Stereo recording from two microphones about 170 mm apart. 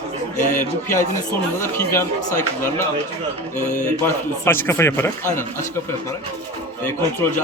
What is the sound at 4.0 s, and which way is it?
Speech, 15° left (ahead or behind).